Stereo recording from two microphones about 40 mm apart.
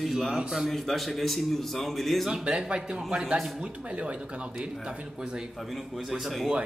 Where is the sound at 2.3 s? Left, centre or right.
Right.